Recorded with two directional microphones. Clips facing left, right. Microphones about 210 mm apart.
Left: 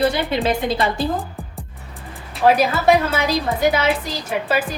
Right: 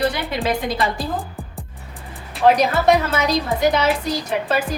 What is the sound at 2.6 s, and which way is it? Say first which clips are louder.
A woman's voice: even; 5° left (ahead or behind).